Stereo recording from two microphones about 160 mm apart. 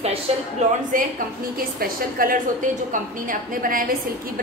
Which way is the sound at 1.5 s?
65° right (ahead or behind).